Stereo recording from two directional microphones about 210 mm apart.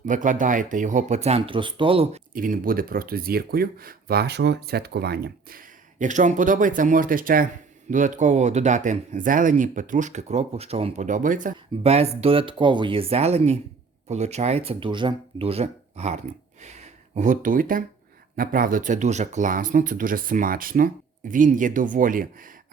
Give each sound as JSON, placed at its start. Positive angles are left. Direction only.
{"t": 0.0, "sound": "speech", "side_deg": -35}
{"t": 2.3, "sound": "speech", "side_deg": -40}